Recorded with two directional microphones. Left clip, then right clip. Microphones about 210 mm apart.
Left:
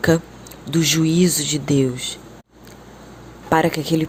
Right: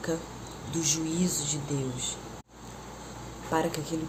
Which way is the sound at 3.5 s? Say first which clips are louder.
Left 12 dB; 40° left (ahead or behind).